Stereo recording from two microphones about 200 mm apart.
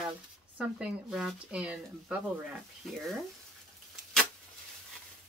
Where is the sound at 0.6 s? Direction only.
5° right (ahead or behind).